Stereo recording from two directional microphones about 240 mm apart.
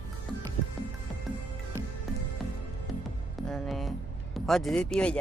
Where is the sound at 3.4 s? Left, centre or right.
Centre.